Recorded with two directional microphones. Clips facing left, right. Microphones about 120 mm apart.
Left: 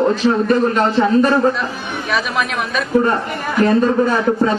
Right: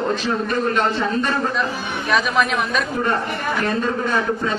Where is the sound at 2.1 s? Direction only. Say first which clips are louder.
Right 1 dB; centre (ahead or behind).